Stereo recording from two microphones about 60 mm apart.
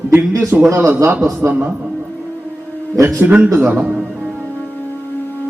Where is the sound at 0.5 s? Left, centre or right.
Right.